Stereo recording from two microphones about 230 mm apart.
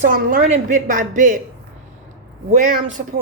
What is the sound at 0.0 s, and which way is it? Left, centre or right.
A man's voice, right.